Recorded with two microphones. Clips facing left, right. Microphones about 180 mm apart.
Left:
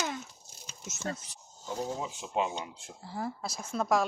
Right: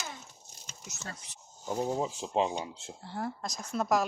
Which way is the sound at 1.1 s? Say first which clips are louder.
Left 7 dB; 45° left (ahead or behind).